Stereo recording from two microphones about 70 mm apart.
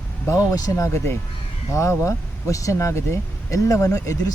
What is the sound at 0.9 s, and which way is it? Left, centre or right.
Speech, left.